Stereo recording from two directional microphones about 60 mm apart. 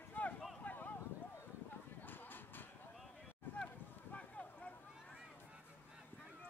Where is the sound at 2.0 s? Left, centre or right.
Left.